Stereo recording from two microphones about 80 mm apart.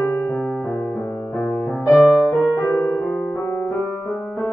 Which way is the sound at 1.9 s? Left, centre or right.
Centre.